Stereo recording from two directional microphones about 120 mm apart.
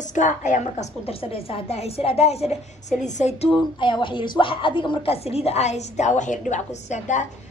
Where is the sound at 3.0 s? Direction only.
70° left (ahead or behind).